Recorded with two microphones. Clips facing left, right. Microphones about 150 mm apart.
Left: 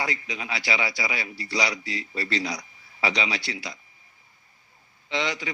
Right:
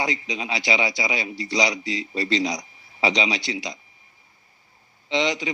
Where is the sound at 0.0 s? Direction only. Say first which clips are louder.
Right 4 dB; 20° right (ahead or behind).